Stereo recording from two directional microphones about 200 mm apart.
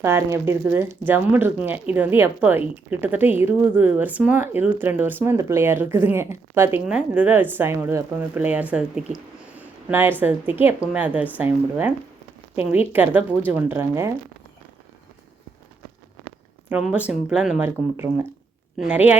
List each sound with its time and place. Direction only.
0.0 s speech: 10° right (ahead or behind)
16.6 s speech: 5° right (ahead or behind)